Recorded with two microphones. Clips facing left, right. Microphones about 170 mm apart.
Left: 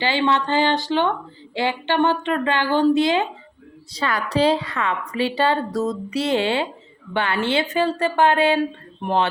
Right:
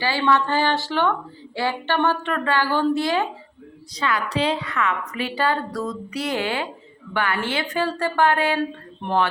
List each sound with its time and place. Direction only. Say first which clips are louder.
0.0 s a woman's voice: even; 20° left (ahead or behind)
3.9 s a woman's voice: left 2 dB; 35° left (ahead or behind); by 9.2 s 15° left (ahead or behind)